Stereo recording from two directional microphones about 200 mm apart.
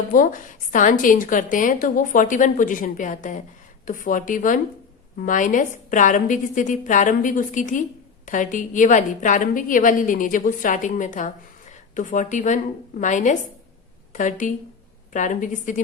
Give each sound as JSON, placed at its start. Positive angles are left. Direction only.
{"t": 0.1, "sound": "a woman's voice", "side_deg": 40}